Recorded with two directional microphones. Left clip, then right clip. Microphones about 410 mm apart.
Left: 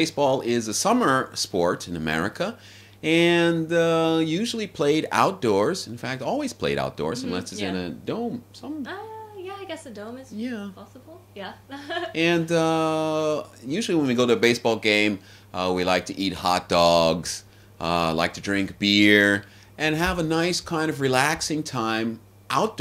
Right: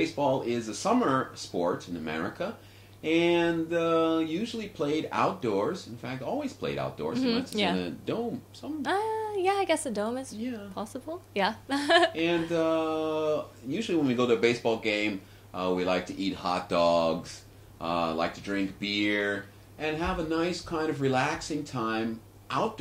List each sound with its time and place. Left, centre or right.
0.0 s speech: left
7.2 s speech: right
7.7 s speech: centre
9.4 s a woman's voice: right
11.3 s a woman's voice: right
12.1 s speech: left